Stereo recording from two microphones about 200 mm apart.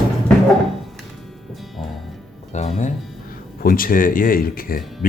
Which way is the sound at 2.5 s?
35° left (ahead or behind).